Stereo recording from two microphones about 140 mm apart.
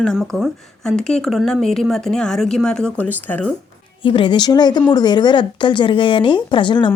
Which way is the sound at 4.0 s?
35° left (ahead or behind).